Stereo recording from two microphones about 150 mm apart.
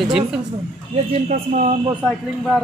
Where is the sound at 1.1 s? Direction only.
50° right (ahead or behind).